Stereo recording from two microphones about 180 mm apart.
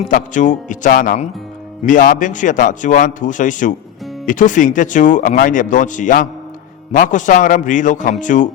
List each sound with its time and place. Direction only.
0.0 s speech: 45° left (ahead or behind)